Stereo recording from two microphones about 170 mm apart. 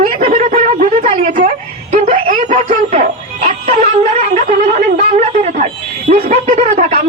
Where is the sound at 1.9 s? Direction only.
45° right (ahead or behind).